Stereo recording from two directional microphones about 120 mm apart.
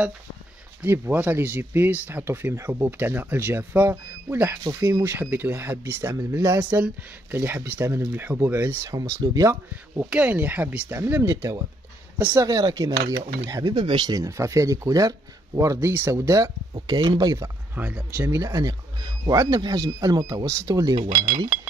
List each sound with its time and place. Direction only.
0.8 s speech: 15° right (ahead or behind)
9.2 s speech: 30° right (ahead or behind)
9.9 s speech: 10° right (ahead or behind)
11.2 s speech: 30° right (ahead or behind)
16.7 s speech: 35° right (ahead or behind)
17.7 s speech: 15° right (ahead or behind); by 21.5 s 40° right (ahead or behind)